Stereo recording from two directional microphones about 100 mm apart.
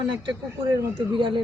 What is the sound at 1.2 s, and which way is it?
Speech, 55° right (ahead or behind).